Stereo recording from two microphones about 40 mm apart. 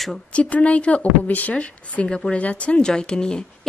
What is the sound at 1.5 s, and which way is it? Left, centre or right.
Speech, left.